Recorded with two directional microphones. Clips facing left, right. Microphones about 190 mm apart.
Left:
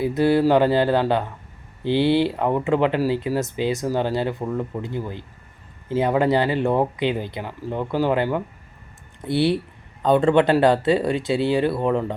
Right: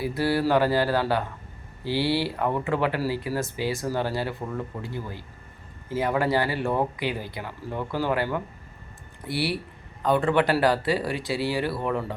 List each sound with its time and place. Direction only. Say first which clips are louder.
0.0 s speech: left 6 dB; 20° left (ahead or behind)